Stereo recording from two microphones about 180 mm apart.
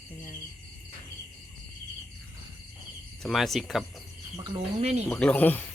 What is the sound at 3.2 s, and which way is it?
Speech, centre (ahead or behind).